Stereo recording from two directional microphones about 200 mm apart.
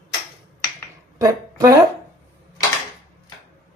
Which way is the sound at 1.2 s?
15° right (ahead or behind).